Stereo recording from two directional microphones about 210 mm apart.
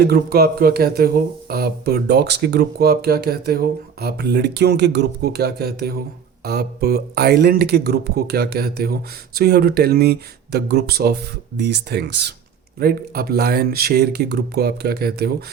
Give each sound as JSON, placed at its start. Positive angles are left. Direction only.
{"t": 0.0, "sound": "speech", "side_deg": -45}